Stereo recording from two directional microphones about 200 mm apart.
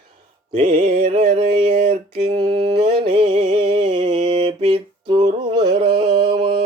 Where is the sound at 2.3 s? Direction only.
25° right (ahead or behind).